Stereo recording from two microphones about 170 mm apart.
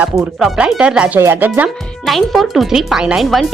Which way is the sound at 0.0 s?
5° right (ahead or behind).